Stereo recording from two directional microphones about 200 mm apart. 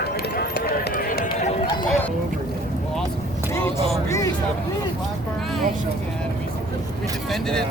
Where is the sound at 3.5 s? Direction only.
15° left (ahead or behind).